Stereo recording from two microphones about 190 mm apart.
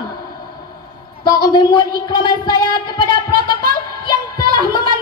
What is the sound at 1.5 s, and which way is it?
Music, 25° left (ahead or behind).